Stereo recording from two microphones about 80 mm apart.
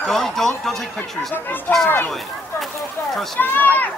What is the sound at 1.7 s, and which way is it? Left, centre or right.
Speech, left.